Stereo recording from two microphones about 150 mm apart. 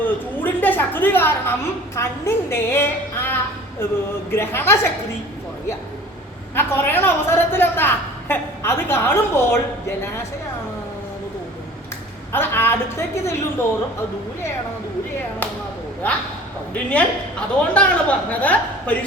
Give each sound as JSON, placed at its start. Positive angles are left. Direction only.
{"t": 0.0, "sound": "a sound", "side_deg": 10}
{"t": 2.0, "sound": "a woman's voice", "side_deg": 15}
{"t": 6.5, "sound": "a woman's voice", "side_deg": 15}
{"t": 12.3, "sound": "a woman's voice", "side_deg": 15}
{"t": 16.0, "sound": "a woman's voice", "side_deg": 10}